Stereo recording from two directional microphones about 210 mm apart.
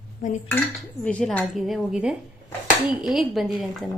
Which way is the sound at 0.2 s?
35° left (ahead or behind).